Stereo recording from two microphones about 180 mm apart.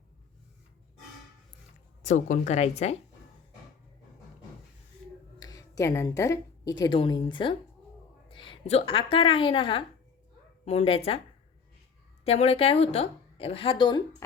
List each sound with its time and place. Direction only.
2.0 s speech: 40° left (ahead or behind)
5.4 s a woman's voice: 20° left (ahead or behind)
12.2 s speech: 35° left (ahead or behind)